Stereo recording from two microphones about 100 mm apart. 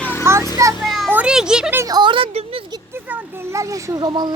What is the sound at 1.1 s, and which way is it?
Children playing, 10° right (ahead or behind).